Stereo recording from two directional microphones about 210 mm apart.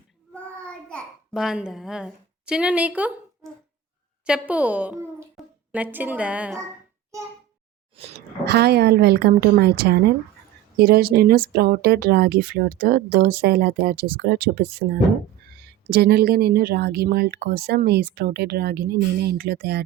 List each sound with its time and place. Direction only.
0.3 s babbling: 5° left (ahead or behind)
4.3 s a child's voice: 5° right (ahead or behind)
8.4 s speech: 50° right (ahead or behind)